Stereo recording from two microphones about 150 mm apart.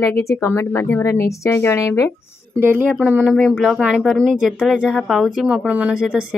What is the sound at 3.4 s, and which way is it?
Speech, 5° left (ahead or behind).